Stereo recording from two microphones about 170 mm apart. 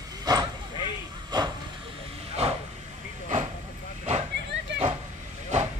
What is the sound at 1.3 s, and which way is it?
Hiss, 25° right (ahead or behind).